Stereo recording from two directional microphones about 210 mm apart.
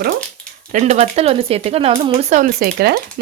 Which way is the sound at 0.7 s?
30° right (ahead or behind).